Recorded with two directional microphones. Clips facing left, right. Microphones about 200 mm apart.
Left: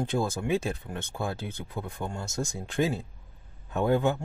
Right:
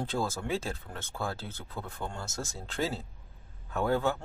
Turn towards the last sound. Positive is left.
turn(degrees=20)  # may be behind; listen again after turning